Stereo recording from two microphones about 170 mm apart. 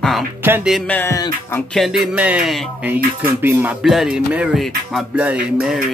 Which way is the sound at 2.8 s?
10° right (ahead or behind).